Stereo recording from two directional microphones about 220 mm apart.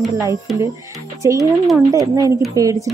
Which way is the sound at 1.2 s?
15° right (ahead or behind).